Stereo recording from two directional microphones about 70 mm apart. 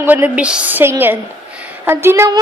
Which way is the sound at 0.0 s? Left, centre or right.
Right.